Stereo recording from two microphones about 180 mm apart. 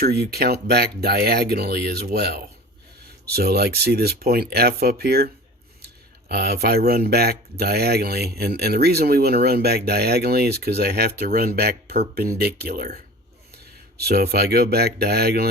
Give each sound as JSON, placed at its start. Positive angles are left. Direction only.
{"t": 0.0, "sound": "speech", "side_deg": -60}
{"t": 14.0, "sound": "speech", "side_deg": -60}